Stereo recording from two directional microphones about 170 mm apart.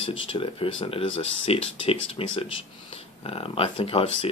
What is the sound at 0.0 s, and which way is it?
Speech, 30° left (ahead or behind).